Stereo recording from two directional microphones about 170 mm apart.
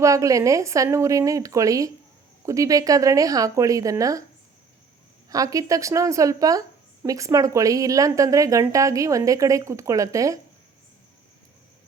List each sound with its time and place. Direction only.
0.0 s a woman's voice: 20° right (ahead or behind)
5.3 s a woman's voice: 20° right (ahead or behind)